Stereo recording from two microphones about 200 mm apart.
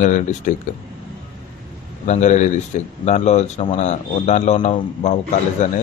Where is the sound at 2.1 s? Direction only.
35° left (ahead or behind).